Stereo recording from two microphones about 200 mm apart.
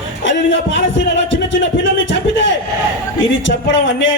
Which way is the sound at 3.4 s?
65° left (ahead or behind).